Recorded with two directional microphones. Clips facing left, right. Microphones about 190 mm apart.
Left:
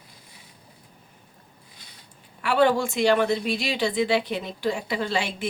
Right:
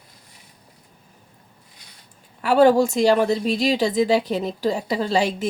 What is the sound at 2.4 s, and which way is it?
A woman's voice, 40° right (ahead or behind).